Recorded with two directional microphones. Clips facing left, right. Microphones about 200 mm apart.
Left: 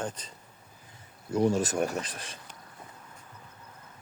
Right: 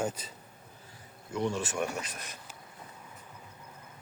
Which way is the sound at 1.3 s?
40° left (ahead or behind).